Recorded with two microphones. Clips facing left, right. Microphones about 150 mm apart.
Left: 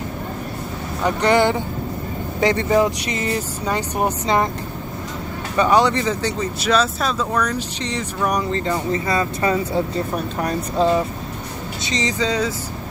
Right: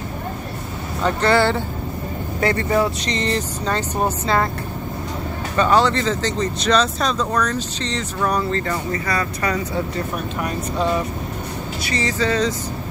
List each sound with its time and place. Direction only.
1.0 s speech: 15° left (ahead or behind)
5.6 s speech: 15° left (ahead or behind); by 10.9 s 35° left (ahead or behind)
11.8 s speech: 20° left (ahead or behind)